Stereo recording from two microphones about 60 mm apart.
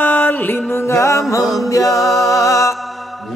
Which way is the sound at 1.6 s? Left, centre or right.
Left.